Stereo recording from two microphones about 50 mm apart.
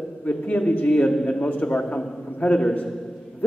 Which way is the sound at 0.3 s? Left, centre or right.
Left.